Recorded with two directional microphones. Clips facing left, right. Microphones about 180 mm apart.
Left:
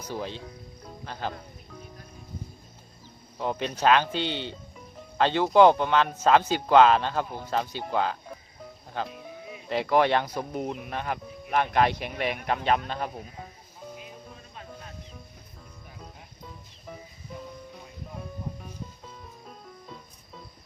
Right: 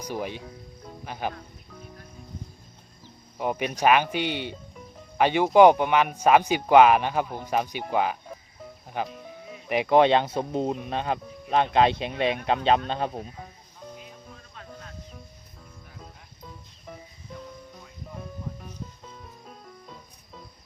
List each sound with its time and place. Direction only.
0.0 s speech: 15° right (ahead or behind)
3.3 s speech: 10° right (ahead or behind); by 13.3 s 30° right (ahead or behind)
16.0 s music: centre (ahead or behind)
18.2 s music: 5° left (ahead or behind)